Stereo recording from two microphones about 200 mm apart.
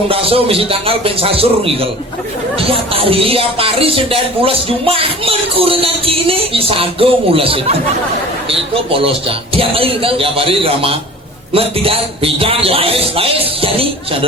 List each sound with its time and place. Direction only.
0.1 s music: 30° right (ahead or behind)